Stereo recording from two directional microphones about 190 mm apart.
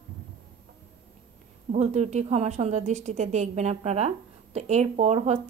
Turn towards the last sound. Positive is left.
turn(degrees=-35)  # may be behind; listen again after turning